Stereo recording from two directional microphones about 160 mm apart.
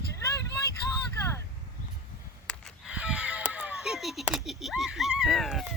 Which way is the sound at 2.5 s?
5° right (ahead or behind).